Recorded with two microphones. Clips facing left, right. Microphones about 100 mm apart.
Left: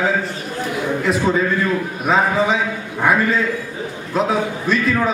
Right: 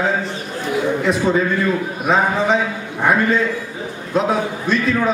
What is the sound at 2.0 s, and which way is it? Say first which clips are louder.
A man's voice: even; centre (ahead or behind).